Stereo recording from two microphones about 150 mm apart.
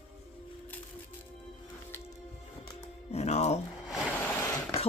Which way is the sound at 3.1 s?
50° left (ahead or behind).